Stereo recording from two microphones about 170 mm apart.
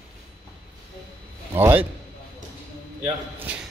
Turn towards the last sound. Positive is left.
turn(degrees=-10)  # may be behind; listen again after turning